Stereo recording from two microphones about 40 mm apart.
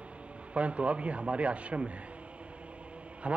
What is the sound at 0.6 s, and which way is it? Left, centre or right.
A man's voice, right.